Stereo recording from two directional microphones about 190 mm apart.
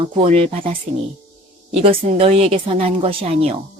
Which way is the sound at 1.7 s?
30° right (ahead or behind).